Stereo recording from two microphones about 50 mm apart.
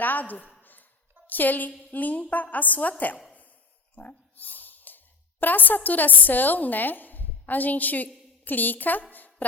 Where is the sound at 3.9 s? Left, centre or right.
Left.